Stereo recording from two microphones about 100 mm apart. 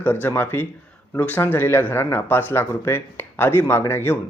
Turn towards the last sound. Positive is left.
turn(degrees=20)  # may be behind; listen again after turning